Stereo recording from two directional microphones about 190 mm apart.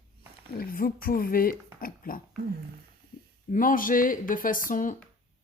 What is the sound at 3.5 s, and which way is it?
Speech, 45° left (ahead or behind).